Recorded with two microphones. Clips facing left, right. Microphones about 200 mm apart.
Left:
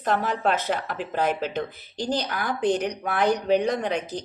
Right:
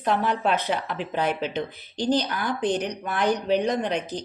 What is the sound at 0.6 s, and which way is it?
Speech, 50° left (ahead or behind).